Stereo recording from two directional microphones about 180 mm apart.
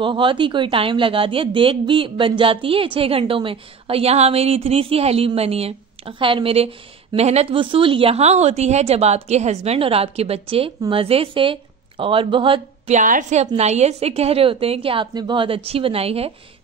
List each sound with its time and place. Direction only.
0.0 s a woman's voice: 30° right (ahead or behind)
12.9 s a woman's voice: 45° right (ahead or behind)